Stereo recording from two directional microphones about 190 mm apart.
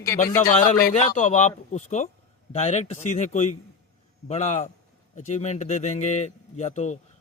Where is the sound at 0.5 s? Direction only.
40° left (ahead or behind).